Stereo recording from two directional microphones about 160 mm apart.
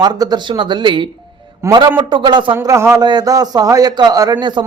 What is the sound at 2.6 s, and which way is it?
A man's voice, 15° right (ahead or behind).